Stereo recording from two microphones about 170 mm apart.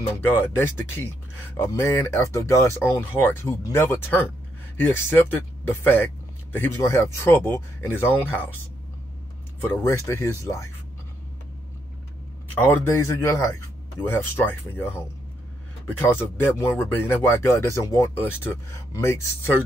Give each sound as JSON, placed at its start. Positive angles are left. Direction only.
{"t": 0.3, "sound": "speech", "side_deg": 15}
{"t": 9.8, "sound": "speech", "side_deg": 15}
{"t": 12.5, "sound": "speech", "side_deg": 15}